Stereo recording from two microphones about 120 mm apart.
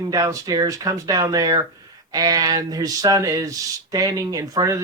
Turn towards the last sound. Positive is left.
turn(degrees=-25)  # may be behind; listen again after turning